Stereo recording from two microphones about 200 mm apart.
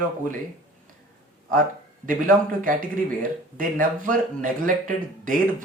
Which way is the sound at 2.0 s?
40° right (ahead or behind).